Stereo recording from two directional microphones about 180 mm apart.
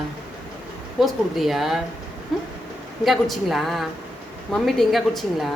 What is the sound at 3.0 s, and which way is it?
A woman's voice, centre (ahead or behind).